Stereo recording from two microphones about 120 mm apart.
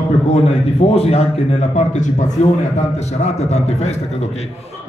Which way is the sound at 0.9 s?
60° left (ahead or behind).